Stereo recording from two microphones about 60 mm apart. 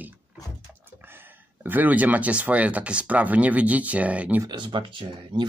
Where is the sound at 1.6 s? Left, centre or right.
Right.